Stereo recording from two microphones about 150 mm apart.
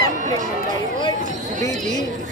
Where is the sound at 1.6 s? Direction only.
55° right (ahead or behind).